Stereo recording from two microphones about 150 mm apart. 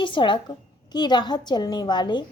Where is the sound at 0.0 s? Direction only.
35° left (ahead or behind).